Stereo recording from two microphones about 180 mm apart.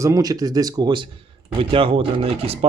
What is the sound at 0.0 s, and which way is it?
Speech, 20° right (ahead or behind).